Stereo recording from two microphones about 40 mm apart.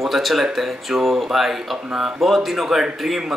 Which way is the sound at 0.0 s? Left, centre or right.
Centre.